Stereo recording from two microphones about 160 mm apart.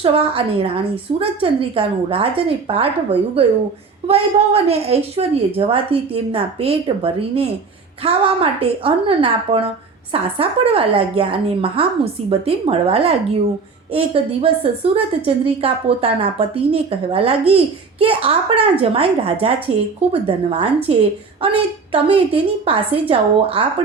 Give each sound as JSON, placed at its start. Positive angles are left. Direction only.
{"t": 0.0, "sound": "a woman's voice", "side_deg": -35}